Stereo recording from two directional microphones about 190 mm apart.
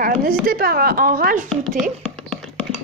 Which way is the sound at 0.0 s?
50° right (ahead or behind).